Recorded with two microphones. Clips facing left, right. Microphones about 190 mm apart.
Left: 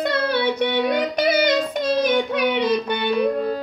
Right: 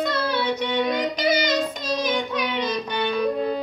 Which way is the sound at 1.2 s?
60° left (ahead or behind).